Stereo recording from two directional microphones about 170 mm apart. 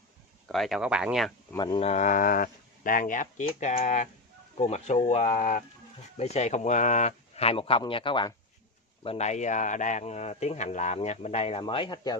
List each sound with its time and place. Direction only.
0.5 s speech: centre (ahead or behind)
1.5 s speech: 25° left (ahead or behind)
1.8 s speech: 45° left (ahead or behind); by 12.2 s 25° left (ahead or behind)